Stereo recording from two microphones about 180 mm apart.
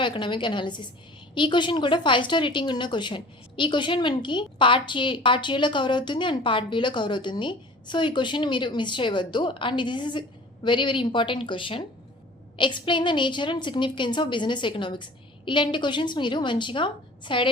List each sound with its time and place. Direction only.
0.0 s a woman's voice: 25° left (ahead or behind)